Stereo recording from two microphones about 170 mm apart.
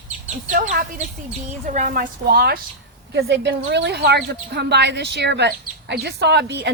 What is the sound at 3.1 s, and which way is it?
A woman's voice, 80° right.